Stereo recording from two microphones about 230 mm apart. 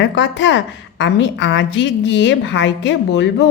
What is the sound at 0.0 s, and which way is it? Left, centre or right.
A woman's voice, left.